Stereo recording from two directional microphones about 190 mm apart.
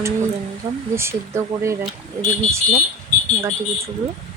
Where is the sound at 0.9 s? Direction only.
15° right (ahead or behind).